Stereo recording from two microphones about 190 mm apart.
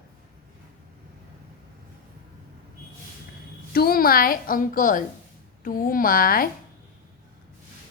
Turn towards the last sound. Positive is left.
turn(degrees=50)  # may be behind; listen again after turning